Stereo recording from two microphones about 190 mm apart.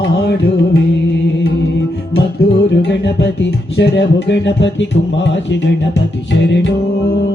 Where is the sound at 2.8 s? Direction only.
65° left (ahead or behind).